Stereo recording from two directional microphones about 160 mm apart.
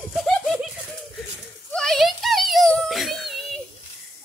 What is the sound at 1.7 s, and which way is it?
Whimper, 5° left (ahead or behind).